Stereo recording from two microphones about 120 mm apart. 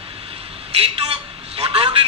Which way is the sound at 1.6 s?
50° right (ahead or behind).